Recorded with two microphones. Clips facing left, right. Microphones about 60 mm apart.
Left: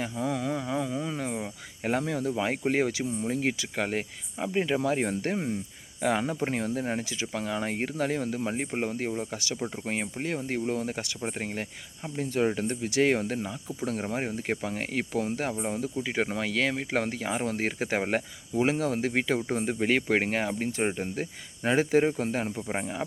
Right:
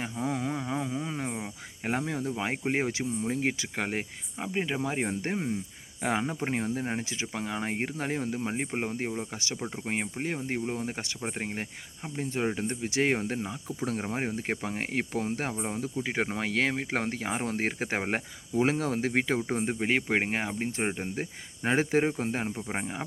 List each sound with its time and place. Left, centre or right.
0.2 s a sound: right
1.0 s cricket: right
1.8 s speech: right
4.4 s speech: centre; by 19.4 s right
19.5 s speech: right
22.5 s speech: centre